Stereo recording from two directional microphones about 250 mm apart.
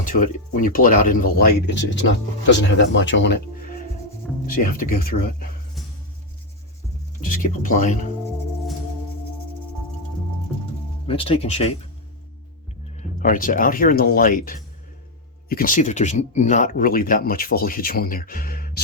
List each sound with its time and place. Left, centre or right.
0.0 s speech: left
4.4 s speech: left
7.2 s speech: left
11.0 s speech: left
13.0 s speech: left